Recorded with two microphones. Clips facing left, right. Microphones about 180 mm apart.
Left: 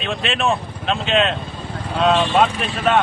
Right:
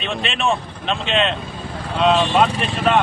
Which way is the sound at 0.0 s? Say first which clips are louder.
Left 1 dB; centre (ahead or behind).